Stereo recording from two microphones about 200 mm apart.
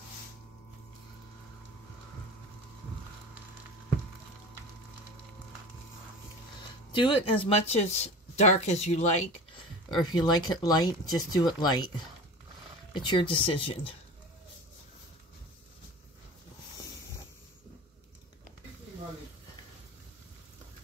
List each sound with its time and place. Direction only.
7.0 s speech: 25° left (ahead or behind)
9.8 s speech: 20° left (ahead or behind)
12.9 s speech: 25° left (ahead or behind)